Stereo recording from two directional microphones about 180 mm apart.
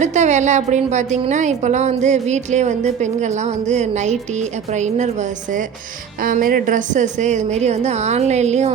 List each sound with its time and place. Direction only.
0.0 s a woman's voice: 40° right (ahead or behind)